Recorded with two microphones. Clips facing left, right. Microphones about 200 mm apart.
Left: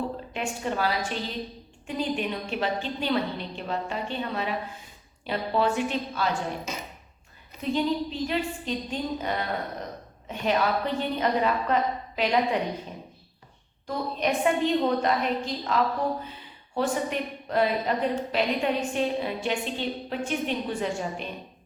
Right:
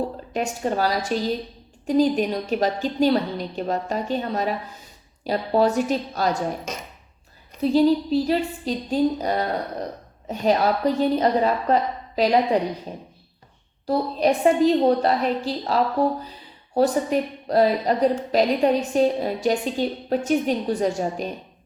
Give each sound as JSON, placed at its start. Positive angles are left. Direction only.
{"t": 0.3, "sound": "a woman's voice", "side_deg": -40}
{"t": 7.6, "sound": "a woman's voice", "side_deg": -35}